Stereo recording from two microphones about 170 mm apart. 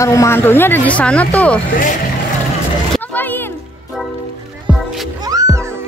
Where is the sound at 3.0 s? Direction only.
10° left (ahead or behind).